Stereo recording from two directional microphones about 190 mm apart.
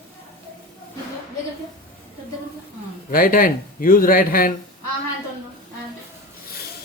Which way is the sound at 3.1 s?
50° left (ahead or behind).